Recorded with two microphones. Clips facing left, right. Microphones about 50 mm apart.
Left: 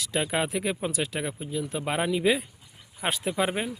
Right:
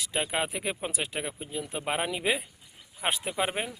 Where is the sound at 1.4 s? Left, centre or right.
Right.